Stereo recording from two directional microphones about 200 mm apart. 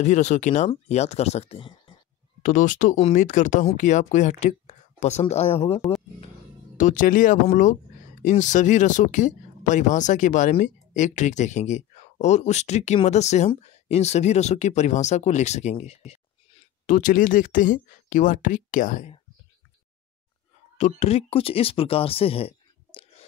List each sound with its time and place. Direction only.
0.0 s speech: 35° left (ahead or behind)
2.4 s speech: 40° left (ahead or behind)
6.8 s speech: 40° left (ahead or behind)
20.7 s speech: 35° left (ahead or behind)